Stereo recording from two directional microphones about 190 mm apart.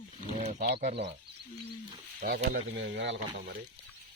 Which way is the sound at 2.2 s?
55° right (ahead or behind).